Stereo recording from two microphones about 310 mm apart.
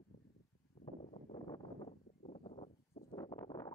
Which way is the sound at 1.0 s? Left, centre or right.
Centre.